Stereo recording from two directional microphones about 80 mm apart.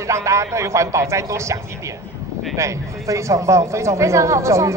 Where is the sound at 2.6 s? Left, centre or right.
Right.